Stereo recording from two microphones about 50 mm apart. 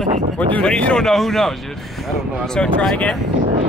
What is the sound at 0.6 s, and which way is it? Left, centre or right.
Speech, centre.